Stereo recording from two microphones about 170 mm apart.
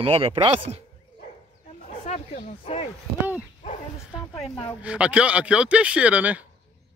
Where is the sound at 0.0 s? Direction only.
35° right (ahead or behind).